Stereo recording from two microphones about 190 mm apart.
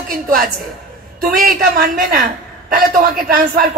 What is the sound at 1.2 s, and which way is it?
A woman's voice, 50° right (ahead or behind).